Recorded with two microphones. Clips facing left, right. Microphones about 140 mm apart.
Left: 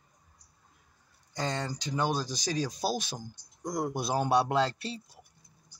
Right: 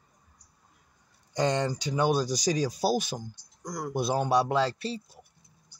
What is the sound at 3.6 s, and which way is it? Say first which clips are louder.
Speech: left 3 dB; 25° left (ahead or behind).